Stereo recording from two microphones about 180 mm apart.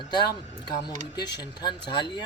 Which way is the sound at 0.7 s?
25° left (ahead or behind).